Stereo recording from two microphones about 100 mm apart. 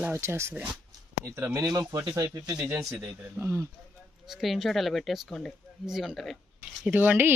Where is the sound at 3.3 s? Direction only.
25° right (ahead or behind).